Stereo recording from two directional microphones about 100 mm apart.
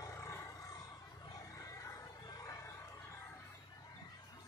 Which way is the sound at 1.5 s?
35° left (ahead or behind).